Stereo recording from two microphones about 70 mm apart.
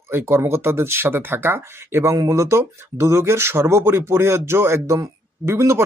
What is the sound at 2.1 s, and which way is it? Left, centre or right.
Speech, right.